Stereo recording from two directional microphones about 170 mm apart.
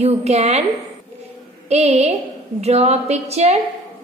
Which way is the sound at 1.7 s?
40° right (ahead or behind).